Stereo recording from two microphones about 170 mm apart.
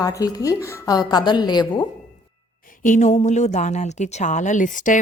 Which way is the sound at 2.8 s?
45° left (ahead or behind).